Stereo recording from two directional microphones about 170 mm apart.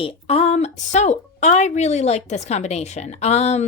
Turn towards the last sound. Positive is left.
turn(degrees=40)  # may be behind; listen again after turning